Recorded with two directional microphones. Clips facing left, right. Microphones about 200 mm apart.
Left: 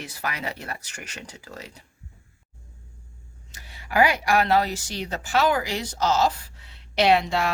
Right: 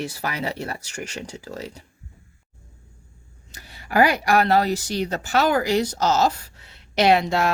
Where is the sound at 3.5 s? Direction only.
40° right (ahead or behind).